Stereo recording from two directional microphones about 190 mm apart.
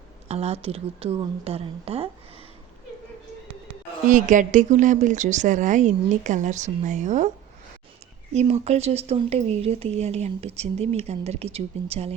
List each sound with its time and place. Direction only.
0.3 s speech: 35° right (ahead or behind)
4.1 s speech: 40° right (ahead or behind)
8.3 s speech: 35° right (ahead or behind)